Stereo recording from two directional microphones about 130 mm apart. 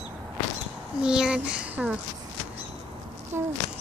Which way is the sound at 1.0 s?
5° right (ahead or behind).